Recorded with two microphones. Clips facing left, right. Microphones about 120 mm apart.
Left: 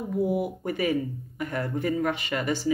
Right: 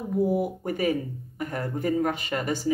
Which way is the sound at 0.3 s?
40° right (ahead or behind).